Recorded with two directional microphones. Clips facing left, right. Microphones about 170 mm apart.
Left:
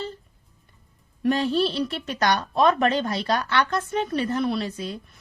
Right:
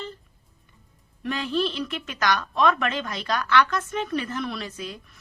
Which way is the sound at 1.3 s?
35° left (ahead or behind).